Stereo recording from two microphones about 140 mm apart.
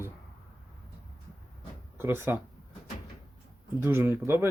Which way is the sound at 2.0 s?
15° right (ahead or behind).